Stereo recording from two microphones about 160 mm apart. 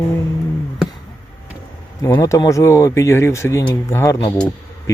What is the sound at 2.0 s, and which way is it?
Speech, 20° left (ahead or behind).